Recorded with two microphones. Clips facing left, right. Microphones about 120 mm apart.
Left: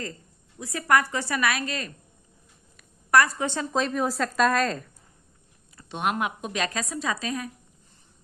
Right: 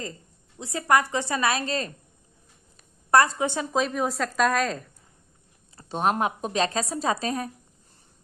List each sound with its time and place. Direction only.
0.6 s a woman's voice: 25° right (ahead or behind)
2.7 s a sound: 30° right (ahead or behind)
3.7 s a woman's voice: 5° right (ahead or behind)
5.7 s a woman's voice: 35° right (ahead or behind)